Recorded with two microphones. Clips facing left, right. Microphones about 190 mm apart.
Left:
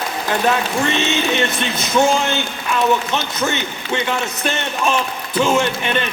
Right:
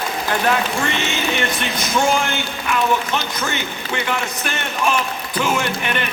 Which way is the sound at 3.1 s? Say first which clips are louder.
Left 3 dB; 20° left (ahead or behind).